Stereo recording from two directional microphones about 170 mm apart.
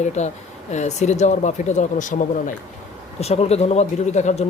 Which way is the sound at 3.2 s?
40° left (ahead or behind).